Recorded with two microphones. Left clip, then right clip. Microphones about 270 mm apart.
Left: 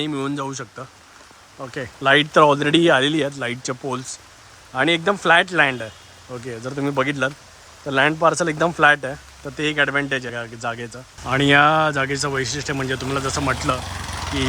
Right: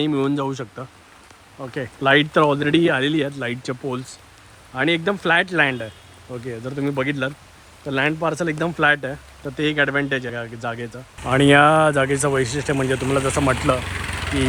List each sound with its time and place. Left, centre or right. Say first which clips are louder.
0.0 s speech: right 4 dB; centre
13.7 s vehicle: right 3 dB; centre